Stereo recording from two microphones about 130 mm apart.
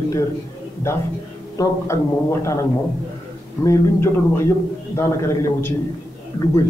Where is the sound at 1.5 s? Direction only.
20° left (ahead or behind).